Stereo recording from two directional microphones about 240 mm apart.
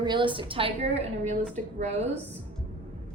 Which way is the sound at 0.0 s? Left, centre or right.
Centre.